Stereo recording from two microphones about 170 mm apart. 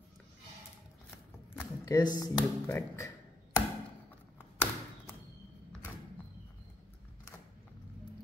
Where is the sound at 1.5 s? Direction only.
20° left (ahead or behind).